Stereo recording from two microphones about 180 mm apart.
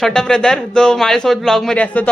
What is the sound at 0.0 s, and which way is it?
A man's voice, 5° left (ahead or behind).